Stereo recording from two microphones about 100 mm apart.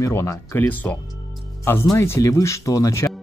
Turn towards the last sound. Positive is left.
turn(degrees=30)  # may be behind; listen again after turning